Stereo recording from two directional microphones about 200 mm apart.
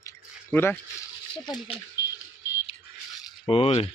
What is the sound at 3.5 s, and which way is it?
Speech, 30° left (ahead or behind).